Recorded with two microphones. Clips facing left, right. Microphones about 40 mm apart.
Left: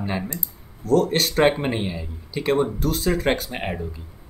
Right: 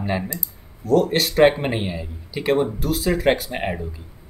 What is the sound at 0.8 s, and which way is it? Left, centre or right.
Speech, centre.